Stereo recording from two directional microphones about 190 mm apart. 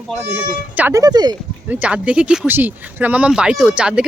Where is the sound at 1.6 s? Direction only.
10° right (ahead or behind).